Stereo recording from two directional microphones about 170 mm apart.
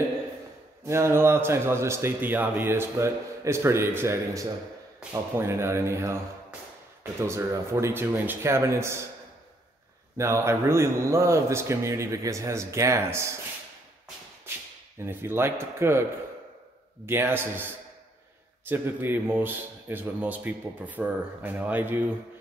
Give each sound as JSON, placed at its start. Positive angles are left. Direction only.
{"t": 0.8, "sound": "speech", "side_deg": -15}
{"t": 10.1, "sound": "speech", "side_deg": -15}
{"t": 15.0, "sound": "speech", "side_deg": -15}
{"t": 18.7, "sound": "speech", "side_deg": -10}